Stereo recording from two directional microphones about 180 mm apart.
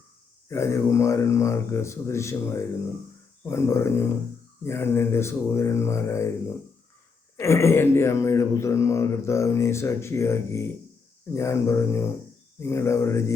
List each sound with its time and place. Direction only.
0.4 s speech: 15° left (ahead or behind)
7.3 s speech: 15° left (ahead or behind)